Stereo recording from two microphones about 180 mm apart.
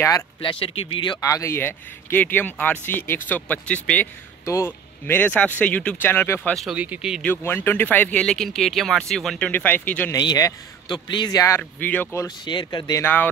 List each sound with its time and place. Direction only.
0.0 s speech: 25° left (ahead or behind)
6.5 s speech: 5° right (ahead or behind)
7.2 s speech: 10° left (ahead or behind)
10.1 s a man's voice: 20° left (ahead or behind)
12.4 s a man's voice: 25° left (ahead or behind)